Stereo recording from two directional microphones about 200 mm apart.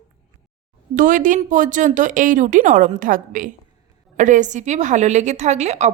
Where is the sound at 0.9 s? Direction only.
40° right (ahead or behind).